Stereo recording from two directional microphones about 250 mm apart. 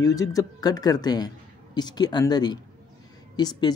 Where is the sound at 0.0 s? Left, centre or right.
Centre.